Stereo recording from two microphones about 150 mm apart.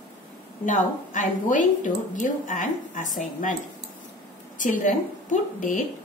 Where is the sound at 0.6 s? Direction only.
55° left (ahead or behind).